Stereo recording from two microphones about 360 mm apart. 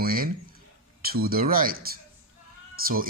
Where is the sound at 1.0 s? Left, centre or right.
Right.